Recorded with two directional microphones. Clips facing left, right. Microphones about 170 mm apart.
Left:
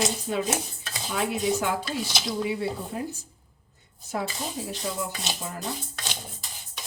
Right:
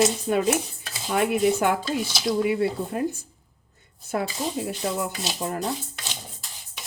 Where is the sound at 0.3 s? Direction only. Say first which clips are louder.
Right 5 dB; 55° right (ahead or behind).